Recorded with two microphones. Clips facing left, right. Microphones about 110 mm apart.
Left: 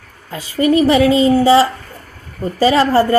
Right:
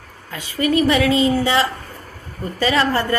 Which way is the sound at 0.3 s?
30° left (ahead or behind).